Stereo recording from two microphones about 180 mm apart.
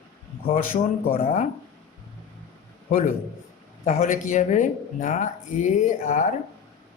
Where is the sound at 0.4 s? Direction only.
50° left (ahead or behind).